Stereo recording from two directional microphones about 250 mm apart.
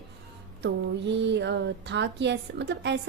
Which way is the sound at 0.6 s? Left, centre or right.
Right.